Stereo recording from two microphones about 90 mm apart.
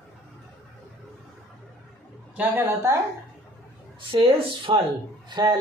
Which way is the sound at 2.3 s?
20° right (ahead or behind).